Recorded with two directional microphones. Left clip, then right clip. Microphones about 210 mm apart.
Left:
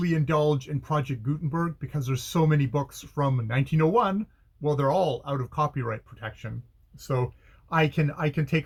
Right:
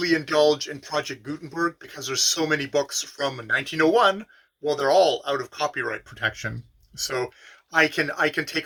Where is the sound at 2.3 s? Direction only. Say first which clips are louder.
Right 3 dB; 5° right (ahead or behind).